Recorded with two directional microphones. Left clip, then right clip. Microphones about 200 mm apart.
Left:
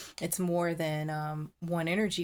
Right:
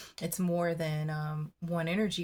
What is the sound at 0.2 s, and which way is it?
Speech, 35° left (ahead or behind).